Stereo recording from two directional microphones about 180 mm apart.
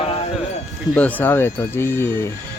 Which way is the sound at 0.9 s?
10° left (ahead or behind).